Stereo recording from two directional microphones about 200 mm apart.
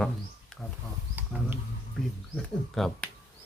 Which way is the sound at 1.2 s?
10° right (ahead or behind).